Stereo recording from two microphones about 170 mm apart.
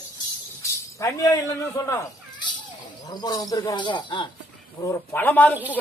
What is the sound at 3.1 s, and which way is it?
Speech, 20° left (ahead or behind).